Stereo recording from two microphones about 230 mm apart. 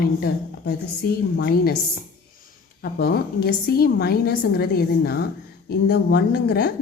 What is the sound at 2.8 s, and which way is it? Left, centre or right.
A woman's voice, left.